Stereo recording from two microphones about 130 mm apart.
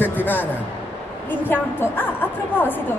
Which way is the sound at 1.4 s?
15° left (ahead or behind).